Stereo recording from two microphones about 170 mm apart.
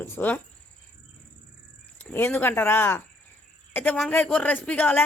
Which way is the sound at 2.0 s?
10° left (ahead or behind).